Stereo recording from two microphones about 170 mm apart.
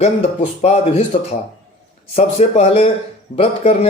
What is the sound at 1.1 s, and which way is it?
A man's voice, 35° left (ahead or behind).